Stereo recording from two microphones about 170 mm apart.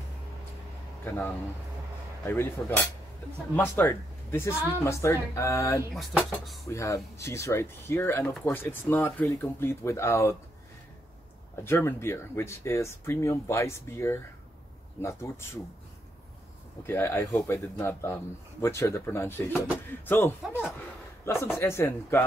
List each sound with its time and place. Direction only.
1.0 s a man's voice: 15° left (ahead or behind)
5.9 s speech: centre (ahead or behind)
6.7 s a man's voice: 20° left (ahead or behind)
11.6 s a man's voice: 15° left (ahead or behind)
16.8 s a man's voice: 15° left (ahead or behind)